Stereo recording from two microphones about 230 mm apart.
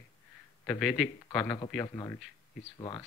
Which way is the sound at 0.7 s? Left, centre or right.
Centre.